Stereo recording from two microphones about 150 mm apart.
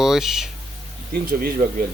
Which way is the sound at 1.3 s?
80° right.